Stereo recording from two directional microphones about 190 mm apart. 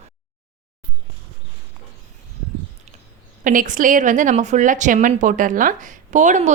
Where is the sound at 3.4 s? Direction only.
45° right (ahead or behind).